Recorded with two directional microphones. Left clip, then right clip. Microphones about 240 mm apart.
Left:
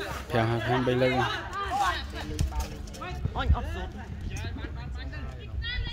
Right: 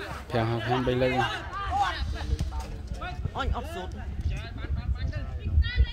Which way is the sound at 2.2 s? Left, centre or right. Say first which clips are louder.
Left 2 dB; left.